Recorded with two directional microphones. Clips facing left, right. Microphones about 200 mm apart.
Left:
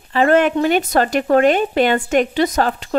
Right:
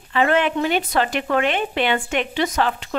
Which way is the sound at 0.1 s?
40° left (ahead or behind).